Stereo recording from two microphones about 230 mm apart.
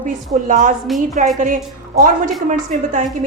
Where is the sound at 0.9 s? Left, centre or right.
Centre.